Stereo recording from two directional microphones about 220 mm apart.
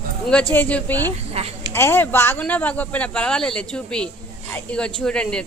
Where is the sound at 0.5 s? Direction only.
10° left (ahead or behind).